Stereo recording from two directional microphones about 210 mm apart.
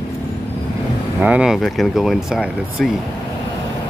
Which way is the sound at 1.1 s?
5° right (ahead or behind).